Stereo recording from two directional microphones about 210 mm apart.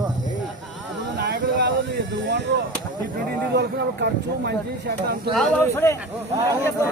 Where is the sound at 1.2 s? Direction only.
50° right (ahead or behind).